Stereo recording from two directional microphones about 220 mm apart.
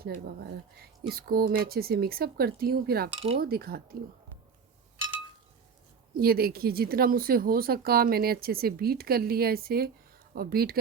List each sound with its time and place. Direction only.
0.0 s speech: 45° right (ahead or behind)
3.2 s a sound: 60° right (ahead or behind)
3.4 s speech: 45° right (ahead or behind)
6.1 s speech: 45° right (ahead or behind)